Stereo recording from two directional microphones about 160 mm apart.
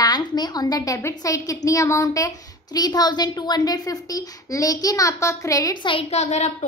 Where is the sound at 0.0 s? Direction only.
25° left (ahead or behind).